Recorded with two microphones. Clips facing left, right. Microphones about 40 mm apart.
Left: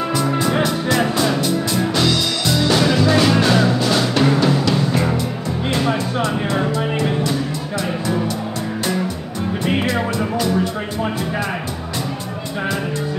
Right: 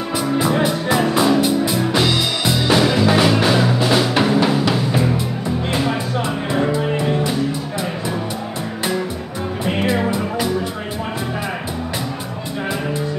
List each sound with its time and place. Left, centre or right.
0.6 s music: centre
6.2 s music: centre
10.1 s music: centre